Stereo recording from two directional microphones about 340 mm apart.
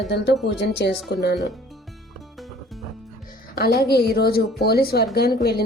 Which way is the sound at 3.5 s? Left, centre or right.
Left.